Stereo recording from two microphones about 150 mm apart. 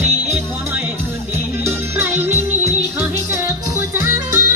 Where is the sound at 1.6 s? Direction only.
15° right (ahead or behind).